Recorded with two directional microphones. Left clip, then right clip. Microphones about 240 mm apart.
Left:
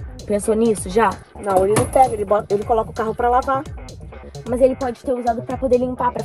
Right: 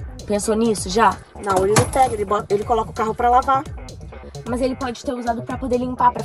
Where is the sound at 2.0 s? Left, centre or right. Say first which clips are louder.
Left 2 dB; centre.